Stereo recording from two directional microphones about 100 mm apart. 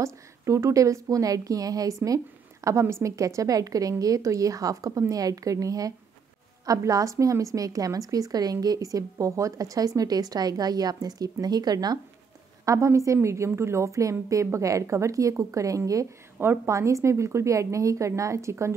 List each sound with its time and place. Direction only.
0.0 s a woman's voice: 30° right (ahead or behind)
12.6 s a woman's voice: 30° right (ahead or behind)